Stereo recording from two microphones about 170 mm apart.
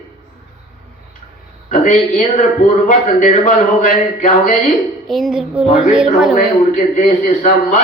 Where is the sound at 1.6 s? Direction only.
45° left (ahead or behind).